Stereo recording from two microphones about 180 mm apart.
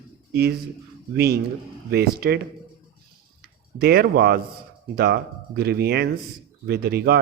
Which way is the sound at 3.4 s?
60° right (ahead or behind).